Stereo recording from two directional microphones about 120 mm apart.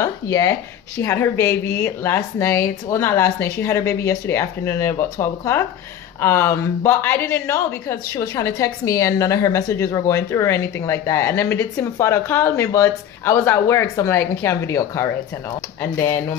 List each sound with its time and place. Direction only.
0.0 s a woman's voice: 25° left (ahead or behind)